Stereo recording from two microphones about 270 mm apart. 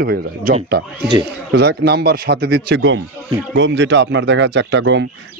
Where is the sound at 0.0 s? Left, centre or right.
Right.